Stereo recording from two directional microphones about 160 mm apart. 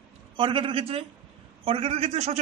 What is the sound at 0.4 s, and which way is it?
A man's voice, 30° right (ahead or behind).